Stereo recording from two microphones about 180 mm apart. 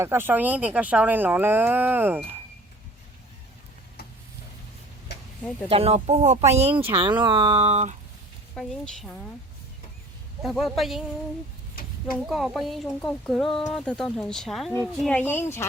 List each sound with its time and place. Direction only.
0.0 s speech: 10° right (ahead or behind)
5.6 s speech: 35° right (ahead or behind)
7.0 s speech: 25° right (ahead or behind)
8.5 s speech: centre (ahead or behind)
10.4 s speech: centre (ahead or behind)
12.1 s speech: centre (ahead or behind)